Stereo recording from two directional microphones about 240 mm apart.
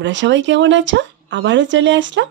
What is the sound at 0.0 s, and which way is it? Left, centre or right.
Speech, right.